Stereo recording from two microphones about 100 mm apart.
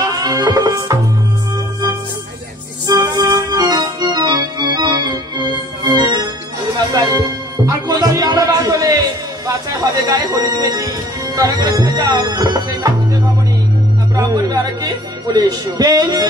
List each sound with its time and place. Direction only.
0.0 s music: 40° right (ahead or behind)
2.9 s organ: 40° right (ahead or behind)
6.9 s music: 40° right (ahead or behind)
10.0 s music: 40° right (ahead or behind)
14.1 s music: 40° right (ahead or behind)
15.3 s speech: 40° right (ahead or behind)